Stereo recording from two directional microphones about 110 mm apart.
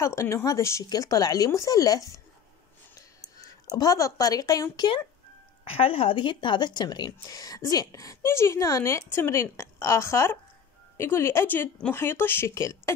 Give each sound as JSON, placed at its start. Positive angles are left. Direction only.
{"t": 0.0, "sound": "speech", "side_deg": 25}
{"t": 3.0, "sound": "a sound", "side_deg": 35}
{"t": 4.7, "sound": "speech", "side_deg": 45}
{"t": 5.7, "sound": "speech", "side_deg": 55}